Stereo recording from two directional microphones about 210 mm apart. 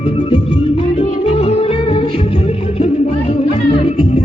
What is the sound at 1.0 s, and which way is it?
Music, 30° left (ahead or behind).